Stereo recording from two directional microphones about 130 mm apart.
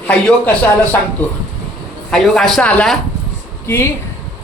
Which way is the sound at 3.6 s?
20° left (ahead or behind).